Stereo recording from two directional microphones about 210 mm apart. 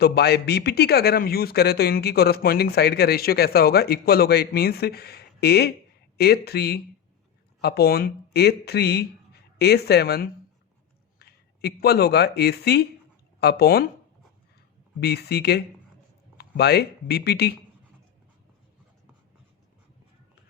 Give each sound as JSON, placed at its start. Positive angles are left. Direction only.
{"t": 0.0, "sound": "a man's voice", "side_deg": 50}
{"t": 15.0, "sound": "a man's voice", "side_deg": 50}